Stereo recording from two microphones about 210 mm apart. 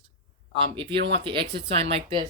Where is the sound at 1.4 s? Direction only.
50° right (ahead or behind).